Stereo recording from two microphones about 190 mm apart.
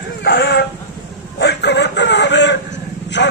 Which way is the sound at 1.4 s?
60° left (ahead or behind).